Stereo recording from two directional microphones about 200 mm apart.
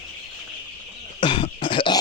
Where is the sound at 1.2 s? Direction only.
25° left (ahead or behind).